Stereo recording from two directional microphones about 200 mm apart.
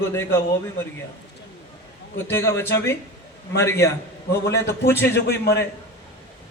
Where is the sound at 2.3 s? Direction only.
10° left (ahead or behind).